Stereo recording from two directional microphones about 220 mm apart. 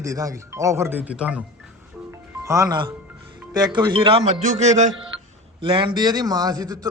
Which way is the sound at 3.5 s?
20° right (ahead or behind).